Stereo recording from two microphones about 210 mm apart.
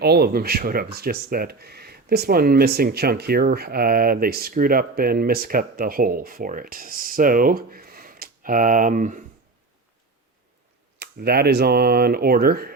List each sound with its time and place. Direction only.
0.0 s speech: 50° right (ahead or behind)
11.0 s speech: 50° right (ahead or behind)